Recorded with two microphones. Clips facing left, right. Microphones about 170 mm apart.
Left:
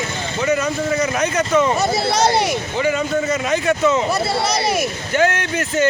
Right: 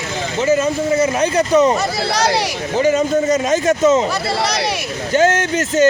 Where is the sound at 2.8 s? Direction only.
40° right (ahead or behind).